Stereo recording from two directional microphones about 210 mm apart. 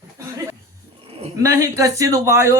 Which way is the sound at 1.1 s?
30° right (ahead or behind).